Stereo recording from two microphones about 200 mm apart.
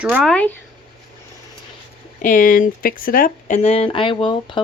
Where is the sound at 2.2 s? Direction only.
40° left (ahead or behind); by 4.6 s 25° left (ahead or behind).